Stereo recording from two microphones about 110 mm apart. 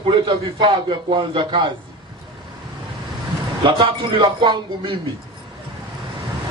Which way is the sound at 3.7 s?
50° right (ahead or behind).